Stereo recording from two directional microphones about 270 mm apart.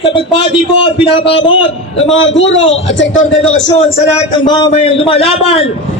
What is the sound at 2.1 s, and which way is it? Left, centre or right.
A man's voice, left.